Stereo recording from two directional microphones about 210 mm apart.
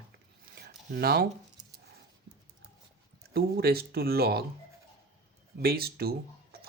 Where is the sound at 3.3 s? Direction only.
50° right (ahead or behind).